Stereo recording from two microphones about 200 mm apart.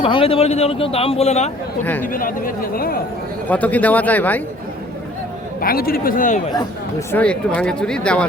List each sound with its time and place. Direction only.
0.0 s speech: 25° left (ahead or behind)
1.8 s speech: 10° left (ahead or behind)
2.1 s speech: 45° left (ahead or behind)
3.5 s speech: 5° left (ahead or behind)
5.5 s speech: 50° left (ahead or behind)
7.1 s speech: 5° left (ahead or behind)